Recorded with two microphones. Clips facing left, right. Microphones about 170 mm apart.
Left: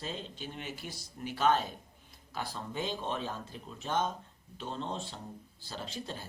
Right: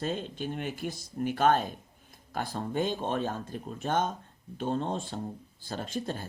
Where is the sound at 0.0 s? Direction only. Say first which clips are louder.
Right 8 dB; 50° right (ahead or behind).